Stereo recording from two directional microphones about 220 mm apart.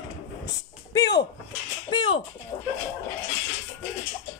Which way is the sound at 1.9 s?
20° left (ahead or behind).